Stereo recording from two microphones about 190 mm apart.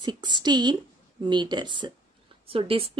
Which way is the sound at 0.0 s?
25° right (ahead or behind).